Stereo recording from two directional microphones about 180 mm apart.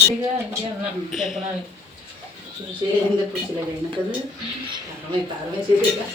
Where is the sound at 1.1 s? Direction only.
Centre (ahead or behind).